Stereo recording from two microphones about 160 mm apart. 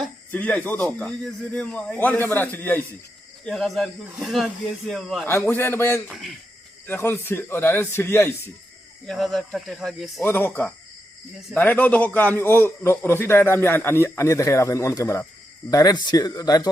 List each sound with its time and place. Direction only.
0.3 s a man's voice: 10° left (ahead or behind)
5.2 s a man's voice: 10° left (ahead or behind)
6.1 s speech: centre (ahead or behind)
6.8 s a man's voice: 15° left (ahead or behind)
9.0 s speech: centre (ahead or behind)
10.2 s a man's voice: 15° left (ahead or behind)